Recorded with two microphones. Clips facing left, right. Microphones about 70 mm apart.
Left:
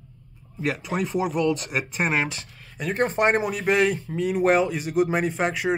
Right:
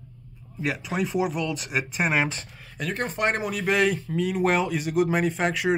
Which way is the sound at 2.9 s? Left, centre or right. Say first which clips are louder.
Left 5 dB; left.